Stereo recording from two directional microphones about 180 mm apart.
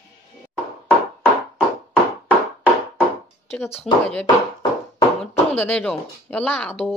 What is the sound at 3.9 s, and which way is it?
Speech, centre (ahead or behind).